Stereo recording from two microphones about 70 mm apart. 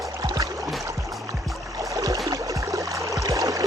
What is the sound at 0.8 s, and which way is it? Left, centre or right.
Music, right.